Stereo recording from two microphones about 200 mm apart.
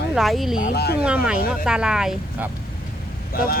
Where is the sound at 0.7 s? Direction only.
50° left (ahead or behind).